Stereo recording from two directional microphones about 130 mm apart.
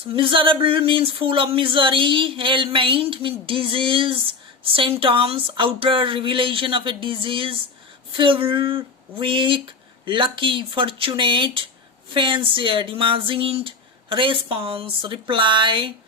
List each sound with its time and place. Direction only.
0.1 s speech: 40° right (ahead or behind)